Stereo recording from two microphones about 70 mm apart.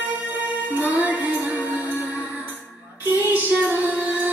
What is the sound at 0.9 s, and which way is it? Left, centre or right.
Music, right.